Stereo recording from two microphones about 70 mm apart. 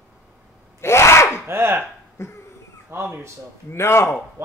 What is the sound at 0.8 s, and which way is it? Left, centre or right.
Sneeze, left.